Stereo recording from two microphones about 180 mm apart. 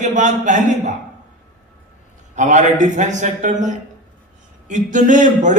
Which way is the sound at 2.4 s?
40° right (ahead or behind).